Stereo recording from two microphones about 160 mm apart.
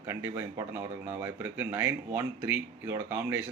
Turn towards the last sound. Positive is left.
turn(degrees=-15)  # may be behind; listen again after turning